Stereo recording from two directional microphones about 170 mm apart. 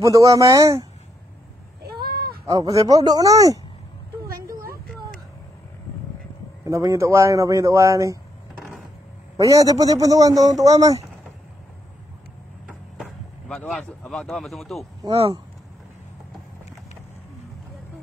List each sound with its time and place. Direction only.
0.0 s a man's voice: 20° right (ahead or behind)
2.0 s bleat: 65° right (ahead or behind)
2.4 s a man's voice: 20° right (ahead or behind)
6.6 s speech: 20° right (ahead or behind)
9.4 s a man's voice: 20° right (ahead or behind)
12.6 s vehicle: centre (ahead or behind)
15.0 s speech: 35° right (ahead or behind)